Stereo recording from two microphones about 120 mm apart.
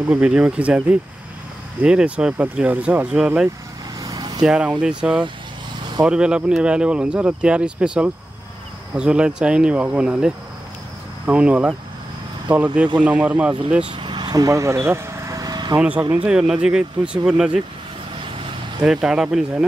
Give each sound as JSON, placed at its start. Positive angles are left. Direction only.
{"t": 0.1, "sound": "speech", "side_deg": -10}
{"t": 4.0, "sound": "vehicle", "side_deg": -30}
{"t": 4.5, "sound": "speech", "side_deg": -5}
{"t": 13.8, "sound": "vehicle", "side_deg": -45}
{"t": 15.8, "sound": "speech", "side_deg": -10}
{"t": 18.2, "sound": "vehicle", "side_deg": -45}
{"t": 18.9, "sound": "speech", "side_deg": -5}